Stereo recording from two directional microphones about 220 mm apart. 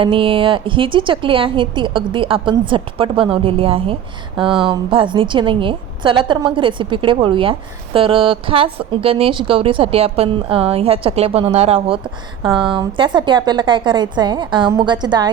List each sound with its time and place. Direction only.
0.0 s a woman's voice: 25° right (ahead or behind)